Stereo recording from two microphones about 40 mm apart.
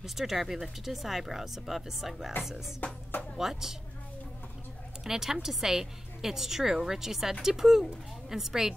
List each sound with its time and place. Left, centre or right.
0.0 s speech: centre
2.8 s speech: left
3.3 s a woman's voice: centre
5.0 s a woman's voice: centre